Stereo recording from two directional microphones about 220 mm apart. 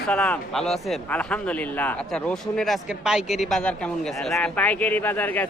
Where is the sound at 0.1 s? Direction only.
5° left (ahead or behind).